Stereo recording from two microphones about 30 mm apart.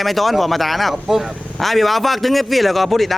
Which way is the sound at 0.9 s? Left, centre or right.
Centre.